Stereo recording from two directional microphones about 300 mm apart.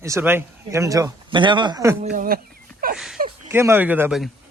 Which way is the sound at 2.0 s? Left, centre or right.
Right.